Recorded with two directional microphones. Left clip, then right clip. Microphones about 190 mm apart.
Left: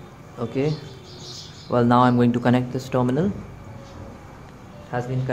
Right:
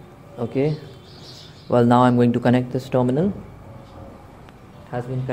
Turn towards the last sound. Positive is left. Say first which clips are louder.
# left 1 dB
turn(degrees=-25)  # may be behind; listen again after turning